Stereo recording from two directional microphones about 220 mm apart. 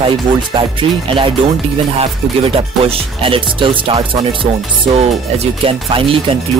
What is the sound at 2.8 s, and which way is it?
Speech, 25° right (ahead or behind).